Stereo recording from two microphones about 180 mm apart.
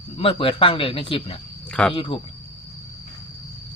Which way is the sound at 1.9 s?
25° left (ahead or behind).